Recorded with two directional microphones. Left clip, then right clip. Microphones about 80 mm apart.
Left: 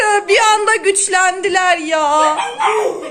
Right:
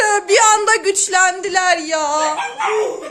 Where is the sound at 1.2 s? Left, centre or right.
Centre.